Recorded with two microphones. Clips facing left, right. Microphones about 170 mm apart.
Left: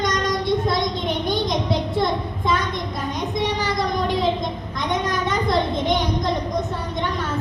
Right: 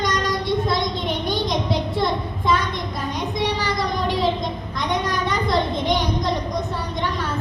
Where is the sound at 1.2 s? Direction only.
50° left (ahead or behind).